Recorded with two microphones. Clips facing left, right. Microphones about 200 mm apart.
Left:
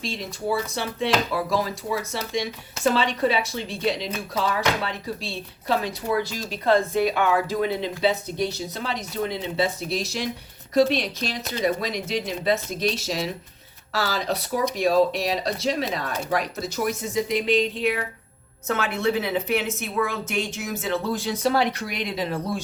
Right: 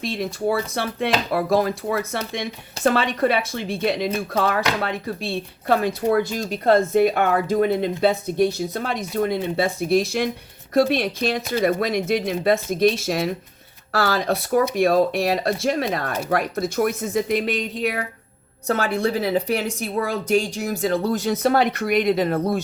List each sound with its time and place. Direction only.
0.0 s a woman's voice: 55° right (ahead or behind)